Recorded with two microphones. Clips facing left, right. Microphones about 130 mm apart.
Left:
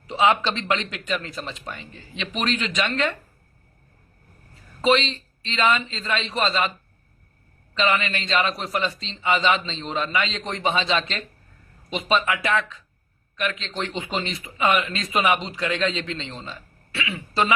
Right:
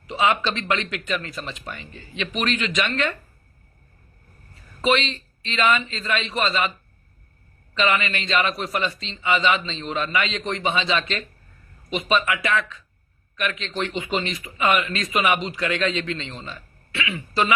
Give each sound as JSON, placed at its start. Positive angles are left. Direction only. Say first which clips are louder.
{"t": 0.2, "sound": "a man's voice", "louder": "left 1 dB", "side_deg": 25}
{"t": 4.8, "sound": "a man's voice", "louder": "left 1 dB", "side_deg": 30}
{"t": 7.8, "sound": "a man's voice", "louder": "even", "side_deg": 30}